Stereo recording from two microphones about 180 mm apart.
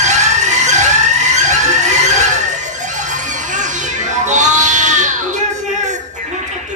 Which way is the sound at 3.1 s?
45° right (ahead or behind).